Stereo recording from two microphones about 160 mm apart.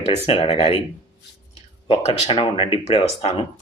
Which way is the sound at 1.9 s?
40° left (ahead or behind).